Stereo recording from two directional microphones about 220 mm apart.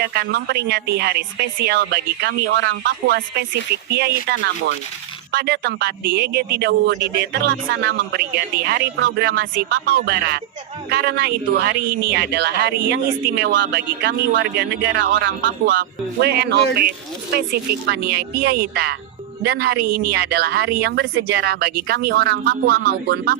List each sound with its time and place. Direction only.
0.0 s speech: 45° right (ahead or behind)